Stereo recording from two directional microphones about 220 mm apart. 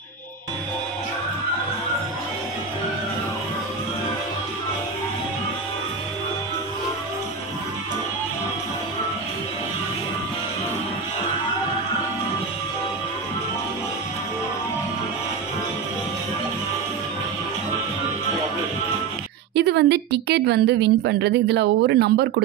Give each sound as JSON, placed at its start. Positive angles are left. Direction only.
{"t": 19.5, "sound": "a woman's voice", "side_deg": -50}